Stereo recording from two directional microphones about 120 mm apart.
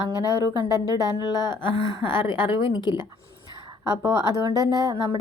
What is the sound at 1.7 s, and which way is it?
Speech, 35° right (ahead or behind).